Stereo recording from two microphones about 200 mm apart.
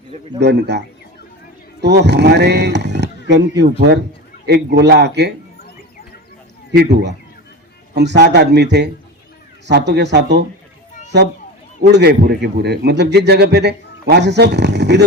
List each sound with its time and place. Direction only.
0.3 s a man's voice: 55° right (ahead or behind)
1.8 s a man's voice: 60° right (ahead or behind)
7.9 s a man's voice: 60° right (ahead or behind)
11.8 s a man's voice: 60° right (ahead or behind)